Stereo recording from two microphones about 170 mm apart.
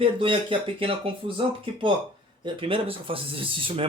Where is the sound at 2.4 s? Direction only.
30° right (ahead or behind).